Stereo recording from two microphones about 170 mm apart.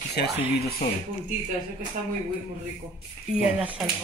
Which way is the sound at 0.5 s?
65° left (ahead or behind).